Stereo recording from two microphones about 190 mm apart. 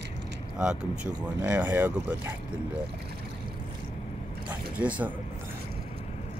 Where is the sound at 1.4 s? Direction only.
10° right (ahead or behind).